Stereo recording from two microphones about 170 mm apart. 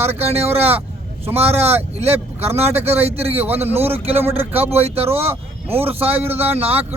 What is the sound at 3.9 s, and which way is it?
A man's voice, 35° right (ahead or behind).